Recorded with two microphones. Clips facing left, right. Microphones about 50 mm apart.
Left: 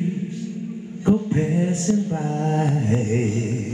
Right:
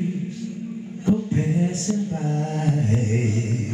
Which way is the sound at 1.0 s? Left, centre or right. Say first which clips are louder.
Left 2 dB; left.